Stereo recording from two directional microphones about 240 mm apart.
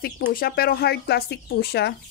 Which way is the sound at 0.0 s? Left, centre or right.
Left.